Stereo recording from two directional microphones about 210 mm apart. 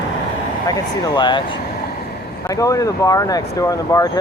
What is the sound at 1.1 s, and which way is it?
Speech, 20° left (ahead or behind).